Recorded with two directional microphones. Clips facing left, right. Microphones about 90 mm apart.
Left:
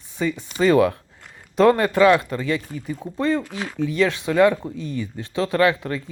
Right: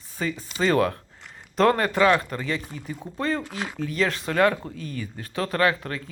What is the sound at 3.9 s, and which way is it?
Speech, 40° right (ahead or behind).